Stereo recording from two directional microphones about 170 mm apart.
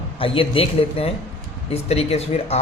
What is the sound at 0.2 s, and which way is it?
A man's voice, 35° left (ahead or behind).